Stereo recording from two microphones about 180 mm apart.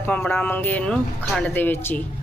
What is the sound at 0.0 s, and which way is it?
Speech, 10° left (ahead or behind).